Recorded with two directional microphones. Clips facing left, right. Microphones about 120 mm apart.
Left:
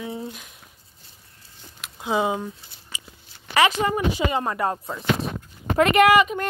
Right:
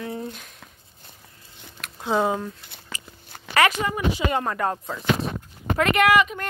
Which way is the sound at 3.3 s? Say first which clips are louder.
Right 9 dB; 55° right (ahead or behind).